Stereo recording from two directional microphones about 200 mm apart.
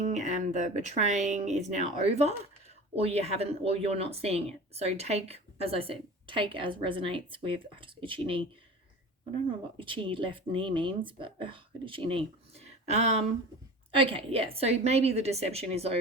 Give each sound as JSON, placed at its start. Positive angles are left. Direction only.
{"t": 0.0, "sound": "speech", "side_deg": -35}
{"t": 9.7, "sound": "speech", "side_deg": -25}